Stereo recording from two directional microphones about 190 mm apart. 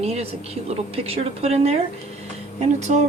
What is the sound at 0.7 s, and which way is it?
A woman's voice, 30° right (ahead or behind).